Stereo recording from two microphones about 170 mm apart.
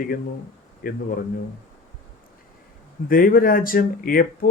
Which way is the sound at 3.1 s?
55° left (ahead or behind).